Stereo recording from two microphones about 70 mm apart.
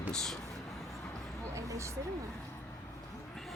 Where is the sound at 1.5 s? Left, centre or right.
Right.